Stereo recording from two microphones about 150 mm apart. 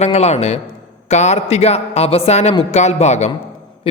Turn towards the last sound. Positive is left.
turn(degrees=50)  # may be behind; listen again after turning